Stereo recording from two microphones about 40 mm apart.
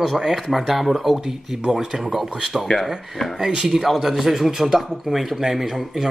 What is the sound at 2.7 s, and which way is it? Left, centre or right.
Speech, left.